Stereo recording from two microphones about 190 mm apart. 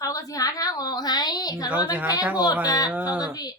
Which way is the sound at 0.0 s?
15° left (ahead or behind).